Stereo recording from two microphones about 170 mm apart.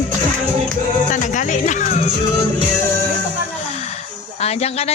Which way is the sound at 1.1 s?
45° left (ahead or behind).